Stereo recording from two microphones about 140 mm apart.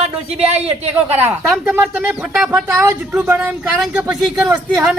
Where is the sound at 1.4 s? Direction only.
5° right (ahead or behind).